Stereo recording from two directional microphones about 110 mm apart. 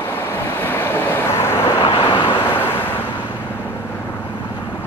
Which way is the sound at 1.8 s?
50° left (ahead or behind).